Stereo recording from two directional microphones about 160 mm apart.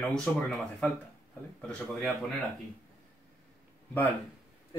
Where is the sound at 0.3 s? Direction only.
10° left (ahead or behind).